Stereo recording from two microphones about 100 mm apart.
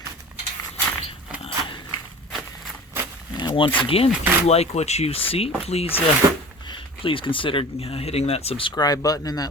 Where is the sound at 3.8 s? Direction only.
75° left (ahead or behind).